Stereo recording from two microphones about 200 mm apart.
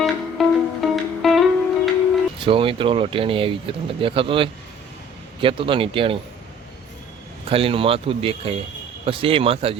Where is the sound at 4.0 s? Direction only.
25° right (ahead or behind).